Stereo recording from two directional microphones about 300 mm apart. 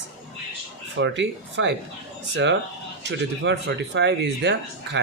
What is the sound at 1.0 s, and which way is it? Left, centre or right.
Speech, right.